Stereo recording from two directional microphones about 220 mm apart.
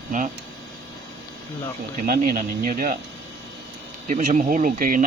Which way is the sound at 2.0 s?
40° right (ahead or behind).